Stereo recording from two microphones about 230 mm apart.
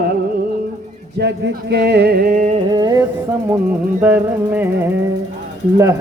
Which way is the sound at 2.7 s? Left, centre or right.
Centre.